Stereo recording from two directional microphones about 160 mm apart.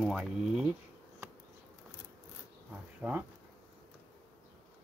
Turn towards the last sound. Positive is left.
turn(degrees=-5)  # may be behind; listen again after turning